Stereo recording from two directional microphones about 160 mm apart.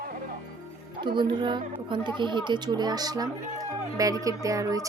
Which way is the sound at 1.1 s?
30° right (ahead or behind).